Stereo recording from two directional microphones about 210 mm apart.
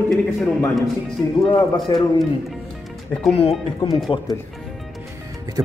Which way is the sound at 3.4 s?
25° left (ahead or behind).